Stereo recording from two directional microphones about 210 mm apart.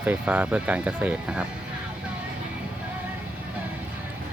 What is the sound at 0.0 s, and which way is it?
Speech, 5° right (ahead or behind).